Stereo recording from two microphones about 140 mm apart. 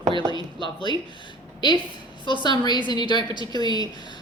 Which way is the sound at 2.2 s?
35° left (ahead or behind).